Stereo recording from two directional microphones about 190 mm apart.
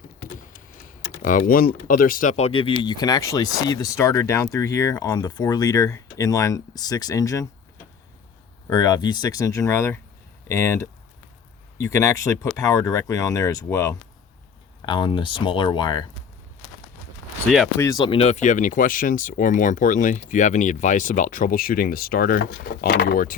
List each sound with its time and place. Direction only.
1.2 s speech: 45° left (ahead or behind); by 7.4 s 20° left (ahead or behind)
8.6 s speech: 20° left (ahead or behind)
17.7 s speech: 15° left (ahead or behind)
18.0 s speech: 30° left (ahead or behind); by 23.3 s 50° left (ahead or behind)